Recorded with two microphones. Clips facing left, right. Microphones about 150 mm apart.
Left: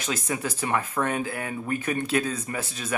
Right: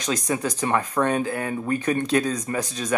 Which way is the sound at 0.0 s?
35° right (ahead or behind).